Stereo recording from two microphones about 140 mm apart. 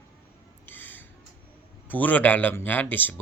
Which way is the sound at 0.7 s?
15° left (ahead or behind).